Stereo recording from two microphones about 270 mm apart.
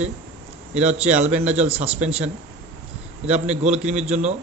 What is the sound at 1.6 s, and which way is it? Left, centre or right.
Speech, right.